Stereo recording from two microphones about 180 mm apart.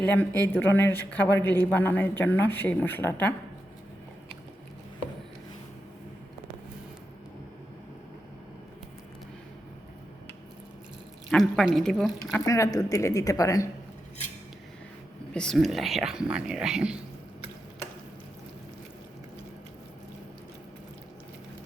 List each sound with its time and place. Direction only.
0.0 s speech: 10° left (ahead or behind)
11.3 s speech: centre (ahead or behind)
12.5 s speech: 20° left (ahead or behind)
15.3 s speech: 5° left (ahead or behind)